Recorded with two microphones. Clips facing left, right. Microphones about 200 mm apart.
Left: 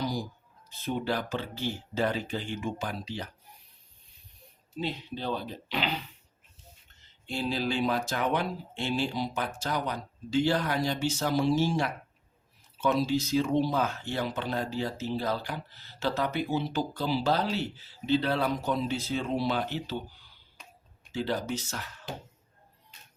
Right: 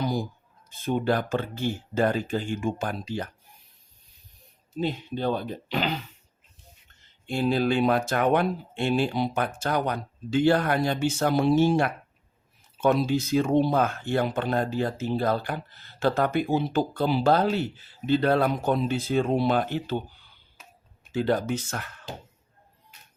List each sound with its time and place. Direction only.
0.0 s speech: 55° right (ahead or behind)
4.8 s speech: 50° right (ahead or behind)
7.3 s speech: 55° right (ahead or behind)
21.1 s speech: 55° right (ahead or behind)